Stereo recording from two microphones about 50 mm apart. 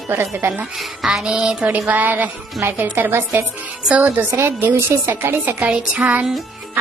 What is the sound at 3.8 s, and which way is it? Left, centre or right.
Speech, centre.